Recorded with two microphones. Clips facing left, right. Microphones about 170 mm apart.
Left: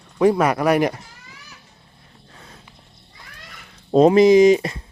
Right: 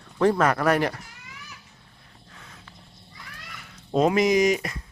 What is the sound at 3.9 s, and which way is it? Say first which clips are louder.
Speech: left 8 dB; 30° left (ahead or behind).